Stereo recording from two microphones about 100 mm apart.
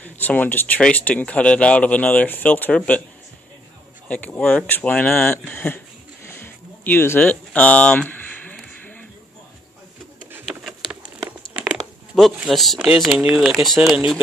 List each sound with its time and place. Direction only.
0.0 s speech: 15° left (ahead or behind)
4.1 s speech: 10° left (ahead or behind)
6.2 s a sound: 20° left (ahead or behind)
11.4 s crumpling: 10° left (ahead or behind)
12.1 s speech: centre (ahead or behind)